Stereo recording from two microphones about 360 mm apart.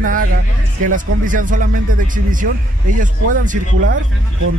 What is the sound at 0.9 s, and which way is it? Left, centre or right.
Speech, right.